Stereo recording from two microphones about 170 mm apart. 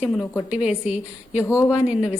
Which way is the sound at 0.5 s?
5° right (ahead or behind).